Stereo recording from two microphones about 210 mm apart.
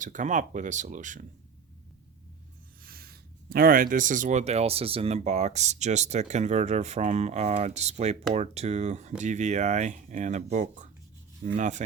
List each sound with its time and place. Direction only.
0.0 s speech: 35° right (ahead or behind)
2.8 s speech: 45° right (ahead or behind)